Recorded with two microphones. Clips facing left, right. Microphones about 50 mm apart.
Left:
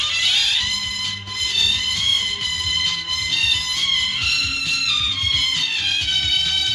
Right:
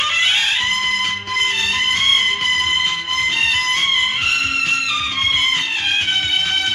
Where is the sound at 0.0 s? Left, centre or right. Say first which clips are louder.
Right 4 dB; right.